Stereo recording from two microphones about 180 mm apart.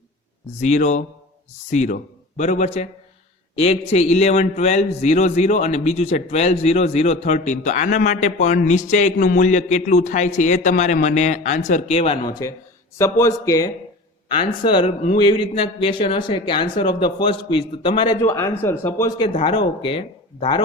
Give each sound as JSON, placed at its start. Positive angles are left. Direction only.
{"t": 0.6, "sound": "a man's voice", "side_deg": 40}
{"t": 12.2, "sound": "a man's voice", "side_deg": 20}
{"t": 18.2, "sound": "a man's voice", "side_deg": 15}